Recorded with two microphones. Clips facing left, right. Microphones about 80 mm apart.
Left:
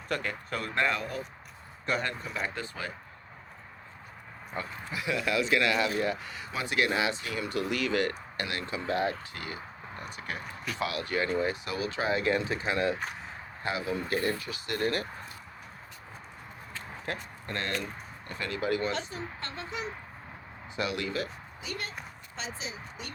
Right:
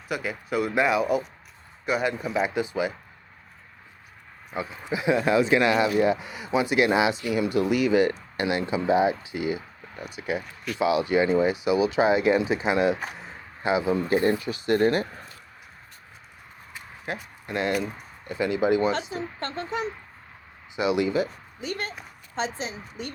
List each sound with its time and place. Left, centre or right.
0.1 s speech: centre
4.5 s speech: centre
4.9 s speech: right
16.7 s a sound: centre
18.3 s speech: centre
19.4 s a woman's voice: right
20.7 s speech: centre
21.6 s a woman's voice: right